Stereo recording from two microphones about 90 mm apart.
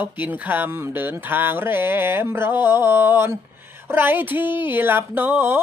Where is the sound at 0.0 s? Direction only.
20° right (ahead or behind).